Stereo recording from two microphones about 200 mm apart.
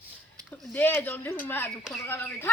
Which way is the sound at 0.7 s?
10° left (ahead or behind).